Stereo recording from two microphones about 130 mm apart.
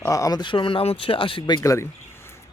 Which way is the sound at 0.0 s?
25° left (ahead or behind).